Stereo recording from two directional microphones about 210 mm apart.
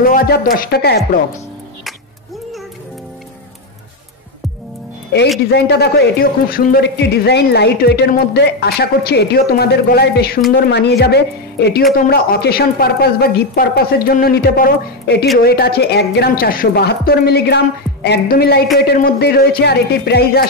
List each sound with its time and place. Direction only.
0.0 s a man's voice: 45° left (ahead or behind)
5.5 s a man's voice: 50° left (ahead or behind)